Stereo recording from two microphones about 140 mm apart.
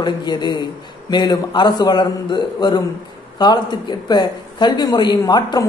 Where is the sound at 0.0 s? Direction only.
30° left (ahead or behind).